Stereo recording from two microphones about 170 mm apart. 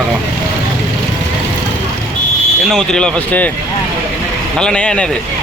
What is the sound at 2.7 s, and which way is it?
Speech, 5° left (ahead or behind).